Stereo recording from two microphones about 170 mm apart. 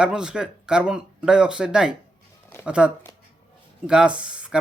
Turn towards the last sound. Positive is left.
turn(degrees=-5)  # may be behind; listen again after turning